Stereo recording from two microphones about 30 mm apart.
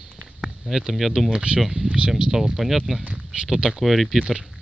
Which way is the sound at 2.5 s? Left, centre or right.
Centre.